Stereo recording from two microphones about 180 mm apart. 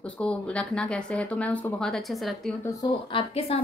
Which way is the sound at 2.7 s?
20° left (ahead or behind).